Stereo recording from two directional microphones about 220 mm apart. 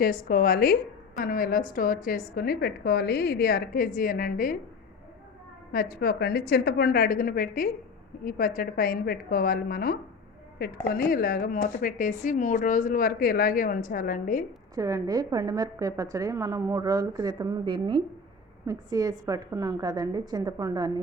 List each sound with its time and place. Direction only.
0.0 s a woman's voice: 40° left (ahead or behind)
5.7 s a woman's voice: 40° left (ahead or behind)
14.8 s a woman's voice: 15° right (ahead or behind)